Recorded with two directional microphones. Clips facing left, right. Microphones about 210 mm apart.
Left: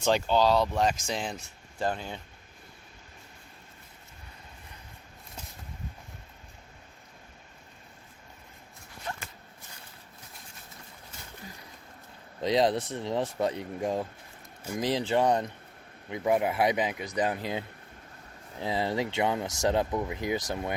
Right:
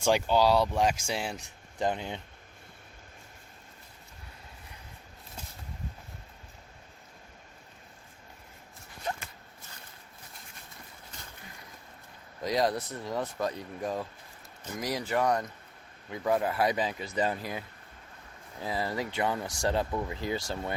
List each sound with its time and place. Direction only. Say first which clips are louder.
0.0 s speech: even; 10° right (ahead or behind)
12.4 s speech: left 3 dB; 25° left (ahead or behind)
18.6 s speech: left 3 dB; 25° left (ahead or behind)